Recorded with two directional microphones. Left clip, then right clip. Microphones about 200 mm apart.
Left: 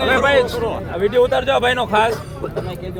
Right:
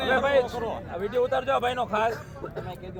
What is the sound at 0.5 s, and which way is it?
Speech, 50° right (ahead or behind).